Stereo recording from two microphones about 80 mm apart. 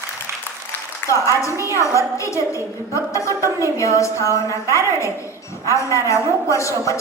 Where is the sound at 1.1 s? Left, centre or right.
Left.